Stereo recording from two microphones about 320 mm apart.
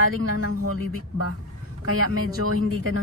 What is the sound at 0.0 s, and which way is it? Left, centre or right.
Speech, right.